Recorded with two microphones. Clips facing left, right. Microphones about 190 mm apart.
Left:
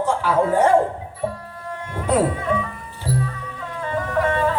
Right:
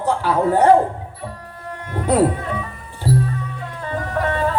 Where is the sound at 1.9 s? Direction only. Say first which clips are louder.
Right 2 dB; 35° right (ahead or behind).